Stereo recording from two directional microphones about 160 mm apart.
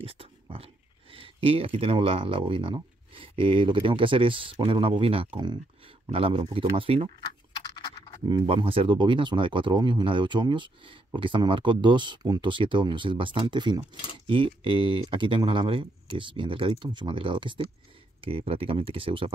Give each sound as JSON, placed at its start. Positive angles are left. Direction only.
{"t": 0.0, "sound": "a sound", "side_deg": -35}
{"t": 1.1, "sound": "speech", "side_deg": -35}
{"t": 8.3, "sound": "speech", "side_deg": -30}